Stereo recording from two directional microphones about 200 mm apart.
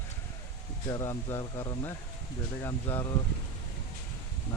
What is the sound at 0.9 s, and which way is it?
Speech, 15° left (ahead or behind).